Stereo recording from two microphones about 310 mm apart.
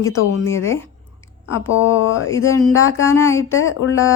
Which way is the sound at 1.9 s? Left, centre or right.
Left.